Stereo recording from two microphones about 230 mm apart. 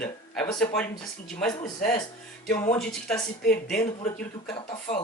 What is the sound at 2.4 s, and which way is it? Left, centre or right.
Speech, centre.